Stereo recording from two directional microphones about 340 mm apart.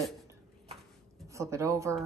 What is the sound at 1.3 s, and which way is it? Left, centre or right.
Speech, centre.